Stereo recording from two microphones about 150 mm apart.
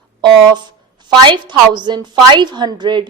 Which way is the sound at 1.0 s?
30° right (ahead or behind).